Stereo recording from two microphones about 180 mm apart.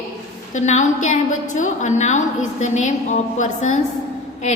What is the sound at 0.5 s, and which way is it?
A woman's voice, 40° left (ahead or behind).